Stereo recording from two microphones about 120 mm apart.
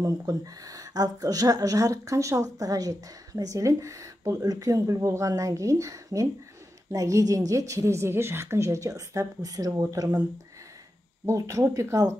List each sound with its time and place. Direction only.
0.0 s speech: 30° right (ahead or behind)
11.2 s speech: 25° right (ahead or behind)